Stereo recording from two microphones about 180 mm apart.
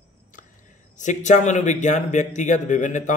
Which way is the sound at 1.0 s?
40° left (ahead or behind).